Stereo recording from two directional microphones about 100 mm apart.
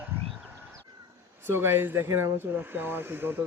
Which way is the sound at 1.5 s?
25° right (ahead or behind).